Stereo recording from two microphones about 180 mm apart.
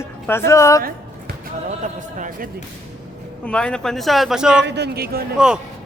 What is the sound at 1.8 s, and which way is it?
Speech, 45° right (ahead or behind).